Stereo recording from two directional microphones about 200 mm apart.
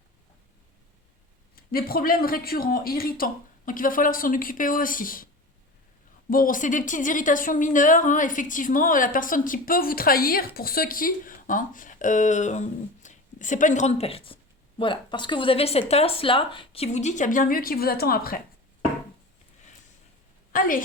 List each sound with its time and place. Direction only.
1.5 s speech: 45° left (ahead or behind)
6.3 s a woman's voice: 45° left (ahead or behind)
20.5 s speech: 45° left (ahead or behind)